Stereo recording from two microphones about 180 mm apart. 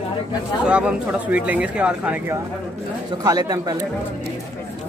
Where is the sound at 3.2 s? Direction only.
20° right (ahead or behind).